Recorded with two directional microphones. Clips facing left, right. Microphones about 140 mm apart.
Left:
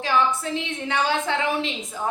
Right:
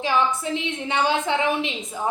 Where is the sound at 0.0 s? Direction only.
20° right (ahead or behind).